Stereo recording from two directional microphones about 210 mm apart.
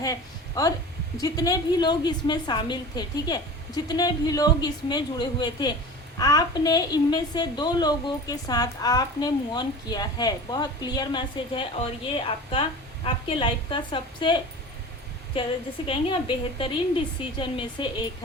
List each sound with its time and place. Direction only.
0.0 s a woman's voice: 15° left (ahead or behind)
15.9 s a woman's voice: 25° left (ahead or behind)